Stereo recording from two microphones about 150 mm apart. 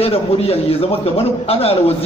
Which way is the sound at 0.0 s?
40° left (ahead or behind).